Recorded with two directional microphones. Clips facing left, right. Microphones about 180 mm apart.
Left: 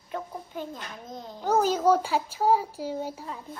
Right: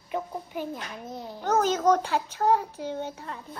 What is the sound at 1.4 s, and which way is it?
A child's voice, 5° left (ahead or behind).